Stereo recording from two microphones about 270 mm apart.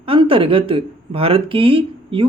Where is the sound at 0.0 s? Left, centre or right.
Centre.